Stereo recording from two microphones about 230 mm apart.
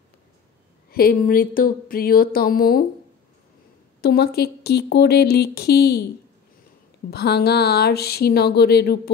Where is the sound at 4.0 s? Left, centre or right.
Left.